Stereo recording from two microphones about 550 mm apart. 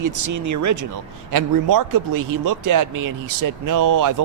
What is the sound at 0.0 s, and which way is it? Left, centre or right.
Speech, right.